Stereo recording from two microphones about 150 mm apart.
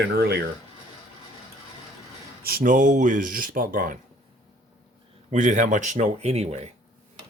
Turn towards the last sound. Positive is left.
turn(degrees=-45)  # may be behind; listen again after turning